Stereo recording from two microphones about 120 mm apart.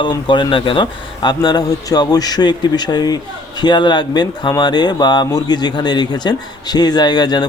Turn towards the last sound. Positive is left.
turn(degrees=35)  # may be behind; listen again after turning